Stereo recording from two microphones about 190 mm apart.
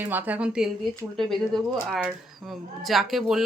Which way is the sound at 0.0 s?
10° right (ahead or behind).